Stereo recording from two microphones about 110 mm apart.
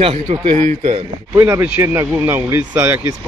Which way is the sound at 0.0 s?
65° right (ahead or behind).